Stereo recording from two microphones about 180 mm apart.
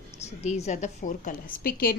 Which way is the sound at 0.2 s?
35° left (ahead or behind).